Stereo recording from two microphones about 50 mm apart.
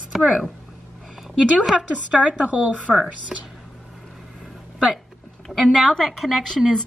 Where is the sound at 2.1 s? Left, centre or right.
Right.